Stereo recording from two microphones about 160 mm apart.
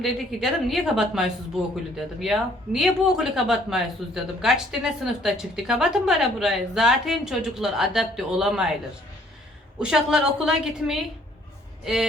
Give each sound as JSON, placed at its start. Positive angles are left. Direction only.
{"t": 0.0, "sound": "speech", "side_deg": 0}
{"t": 9.7, "sound": "speech", "side_deg": -5}